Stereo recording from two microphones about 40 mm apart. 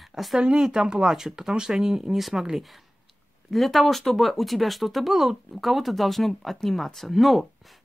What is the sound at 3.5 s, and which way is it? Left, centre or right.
Speech, centre.